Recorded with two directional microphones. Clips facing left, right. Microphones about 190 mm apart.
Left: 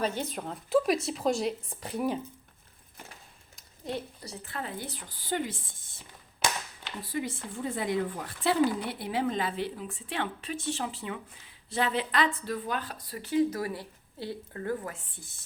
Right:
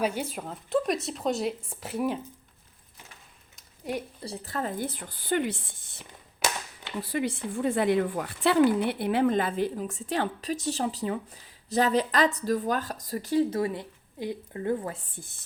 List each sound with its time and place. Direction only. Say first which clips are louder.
0.0 s speech: right 2 dB; 10° right (ahead or behind)
3.9 s a woman's voice: right 2 dB; 10° right (ahead or behind)
4.2 s speech: right 6 dB; 35° right (ahead or behind); by 6.1 s 70° right (ahead or behind)
7.1 s a woman's voice: right 4 dB; 70° right (ahead or behind); by 13.6 s 40° right (ahead or behind)
13.6 s a woman's voice: right 5 dB; 25° right (ahead or behind)
14.9 s a woman's voice: right 5 dB; 45° right (ahead or behind)